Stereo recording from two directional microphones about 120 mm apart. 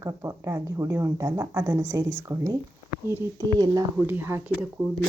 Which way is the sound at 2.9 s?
15° right (ahead or behind).